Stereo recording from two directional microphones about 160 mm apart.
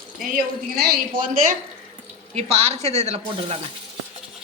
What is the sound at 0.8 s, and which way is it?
Speech, 65° right (ahead or behind).